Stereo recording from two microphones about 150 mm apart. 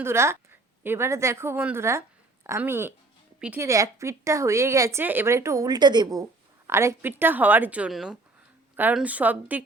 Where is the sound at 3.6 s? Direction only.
20° right (ahead or behind).